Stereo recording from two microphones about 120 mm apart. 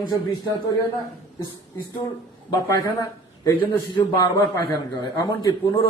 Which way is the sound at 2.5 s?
30° left (ahead or behind).